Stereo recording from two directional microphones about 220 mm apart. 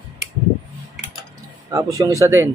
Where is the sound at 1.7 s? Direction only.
15° right (ahead or behind).